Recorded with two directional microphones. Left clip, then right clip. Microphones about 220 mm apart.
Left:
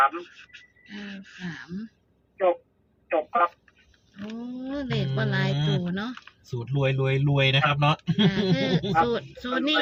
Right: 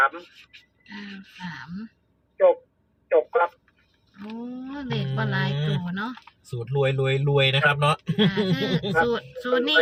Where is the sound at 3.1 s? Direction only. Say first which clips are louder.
Right 3 dB; 40° right (ahead or behind).